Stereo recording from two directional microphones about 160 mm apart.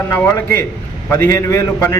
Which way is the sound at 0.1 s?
15° left (ahead or behind).